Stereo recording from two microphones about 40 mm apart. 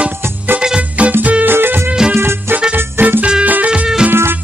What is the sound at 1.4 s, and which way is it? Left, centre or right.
Music, right.